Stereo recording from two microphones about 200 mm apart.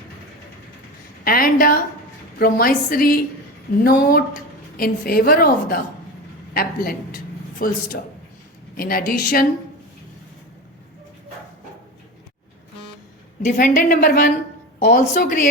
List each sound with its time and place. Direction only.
1.2 s a woman's voice: 45° left (ahead or behind)
13.4 s a woman's voice: 40° left (ahead or behind)